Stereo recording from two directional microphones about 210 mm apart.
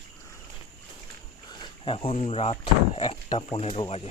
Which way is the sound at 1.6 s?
25° left (ahead or behind).